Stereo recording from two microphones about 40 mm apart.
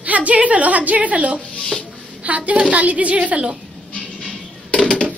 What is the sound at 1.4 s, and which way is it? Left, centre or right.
Speech, left.